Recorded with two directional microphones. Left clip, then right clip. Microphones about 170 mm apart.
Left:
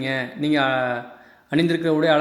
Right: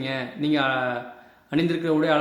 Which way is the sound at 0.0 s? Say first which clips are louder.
Left 3 dB; 20° left (ahead or behind).